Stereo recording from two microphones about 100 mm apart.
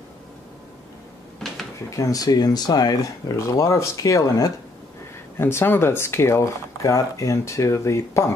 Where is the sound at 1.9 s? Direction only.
35° left (ahead or behind).